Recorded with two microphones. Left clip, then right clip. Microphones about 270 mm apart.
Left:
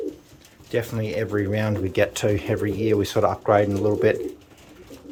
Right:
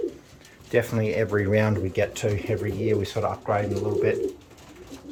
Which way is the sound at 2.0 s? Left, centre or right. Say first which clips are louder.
Left 5 dB; centre.